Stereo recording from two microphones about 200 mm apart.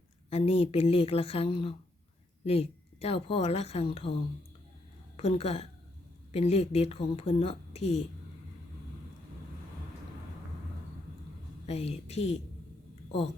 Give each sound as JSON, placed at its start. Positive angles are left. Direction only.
{"t": 0.3, "sound": "a woman's voice", "side_deg": 30}
{"t": 5.1, "sound": "speech", "side_deg": 30}
{"t": 11.6, "sound": "speech", "side_deg": 30}